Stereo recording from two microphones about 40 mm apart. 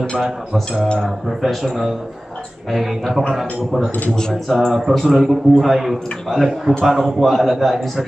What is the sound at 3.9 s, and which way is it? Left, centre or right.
Speech, left.